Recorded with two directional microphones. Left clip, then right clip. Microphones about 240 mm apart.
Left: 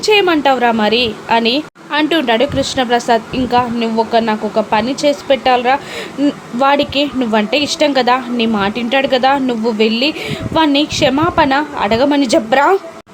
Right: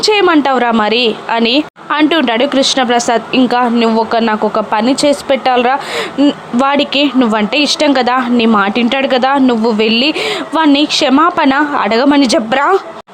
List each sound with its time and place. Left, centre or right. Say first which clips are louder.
0.0 s speech: right 2 dB; centre